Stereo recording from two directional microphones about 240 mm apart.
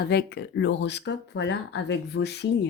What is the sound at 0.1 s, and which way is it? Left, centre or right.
Speech, left.